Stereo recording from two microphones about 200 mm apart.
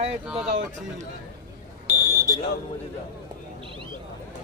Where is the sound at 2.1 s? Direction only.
15° left (ahead or behind).